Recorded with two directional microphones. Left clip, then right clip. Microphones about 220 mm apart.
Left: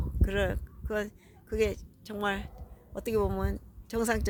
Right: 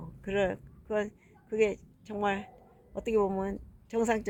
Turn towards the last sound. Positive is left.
turn(degrees=15)  # may be behind; listen again after turning